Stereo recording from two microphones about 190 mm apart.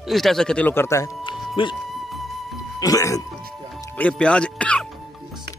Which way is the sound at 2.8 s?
20° left (ahead or behind).